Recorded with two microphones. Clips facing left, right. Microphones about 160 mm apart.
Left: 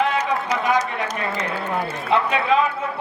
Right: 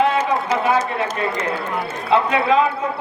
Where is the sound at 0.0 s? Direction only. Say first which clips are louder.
Right 3 dB; 25° right (ahead or behind).